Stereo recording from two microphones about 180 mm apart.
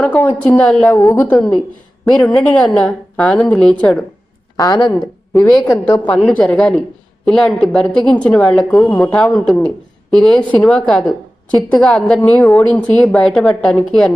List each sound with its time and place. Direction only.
0.0 s a woman's voice: 10° left (ahead or behind)
4.5 s speech: 25° left (ahead or behind)
4.9 s a woman's voice: 5° left (ahead or behind)